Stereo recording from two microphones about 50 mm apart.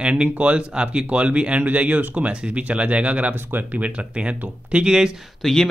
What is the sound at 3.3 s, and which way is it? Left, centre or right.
Speech, right.